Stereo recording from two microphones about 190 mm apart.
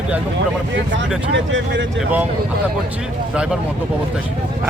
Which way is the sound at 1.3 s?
80° right.